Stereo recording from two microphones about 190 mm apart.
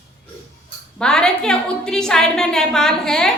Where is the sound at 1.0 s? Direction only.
5° left (ahead or behind).